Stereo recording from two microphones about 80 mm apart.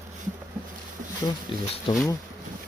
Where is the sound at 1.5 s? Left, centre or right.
Left.